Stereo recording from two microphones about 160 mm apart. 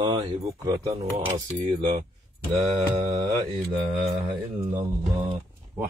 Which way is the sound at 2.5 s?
40° right (ahead or behind).